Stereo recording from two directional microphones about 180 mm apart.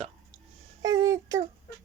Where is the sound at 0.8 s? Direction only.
20° right (ahead or behind).